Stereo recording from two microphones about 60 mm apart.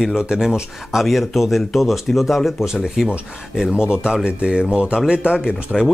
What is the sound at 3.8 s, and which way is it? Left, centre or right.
Speech, centre.